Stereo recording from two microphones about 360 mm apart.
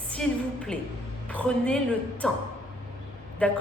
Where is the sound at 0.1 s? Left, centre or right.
Centre.